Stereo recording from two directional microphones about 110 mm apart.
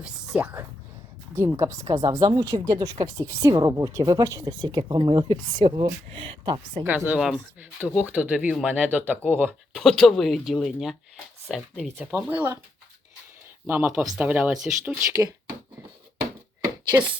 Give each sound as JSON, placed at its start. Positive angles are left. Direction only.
{"t": 0.0, "sound": "speech", "side_deg": -15}
{"t": 2.4, "sound": "speech", "side_deg": -35}
{"t": 4.6, "sound": "speech", "side_deg": -45}
{"t": 7.2, "sound": "speech", "side_deg": -5}
{"t": 7.8, "sound": "speech", "side_deg": -15}
{"t": 9.7, "sound": "speech", "side_deg": 5}
{"t": 12.1, "sound": "speech", "side_deg": -15}
{"t": 13.7, "sound": "speech", "side_deg": -10}
{"t": 15.0, "sound": "speech", "side_deg": -25}